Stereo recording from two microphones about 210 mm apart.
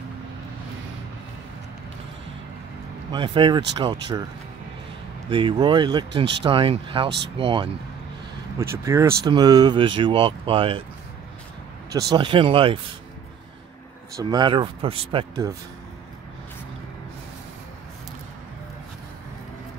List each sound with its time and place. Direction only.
3.1 s speech: 20° right (ahead or behind)
5.3 s speech: 25° right (ahead or behind)
8.5 s speech: 15° right (ahead or behind)
12.1 s speech: 25° right (ahead or behind)
14.1 s speech: 20° right (ahead or behind)